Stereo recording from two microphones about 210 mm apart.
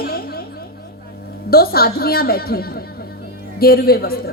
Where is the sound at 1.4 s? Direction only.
45° left (ahead or behind).